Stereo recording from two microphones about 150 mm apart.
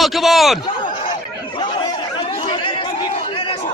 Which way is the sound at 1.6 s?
30° left (ahead or behind).